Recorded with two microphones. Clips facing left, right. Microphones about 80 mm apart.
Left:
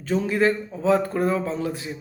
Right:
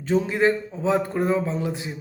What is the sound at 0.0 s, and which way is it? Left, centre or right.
A man's voice, right.